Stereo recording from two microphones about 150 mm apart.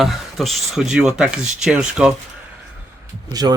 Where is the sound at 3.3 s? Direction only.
25° right (ahead or behind).